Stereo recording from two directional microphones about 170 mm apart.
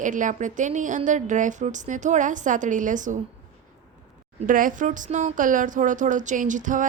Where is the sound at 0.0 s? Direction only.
50° right (ahead or behind).